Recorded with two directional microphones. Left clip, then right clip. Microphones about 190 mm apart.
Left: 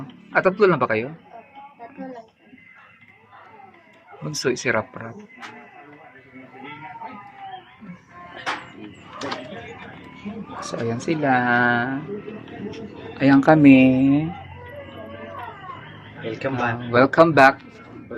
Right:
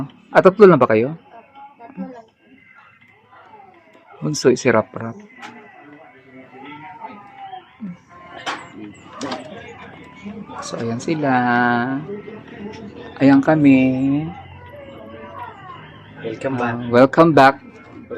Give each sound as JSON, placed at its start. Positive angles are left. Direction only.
{"t": 0.3, "sound": "speech", "side_deg": -20}
{"t": 4.2, "sound": "speech", "side_deg": -20}
{"t": 10.7, "sound": "speech", "side_deg": -10}
{"t": 13.4, "sound": "speech", "side_deg": 5}
{"t": 16.2, "sound": "speech", "side_deg": -35}